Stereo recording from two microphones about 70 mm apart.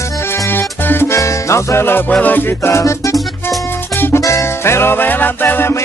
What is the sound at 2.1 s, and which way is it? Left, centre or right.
Music, left.